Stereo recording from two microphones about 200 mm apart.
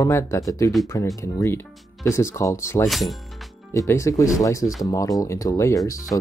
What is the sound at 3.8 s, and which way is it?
Speech, 15° left (ahead or behind).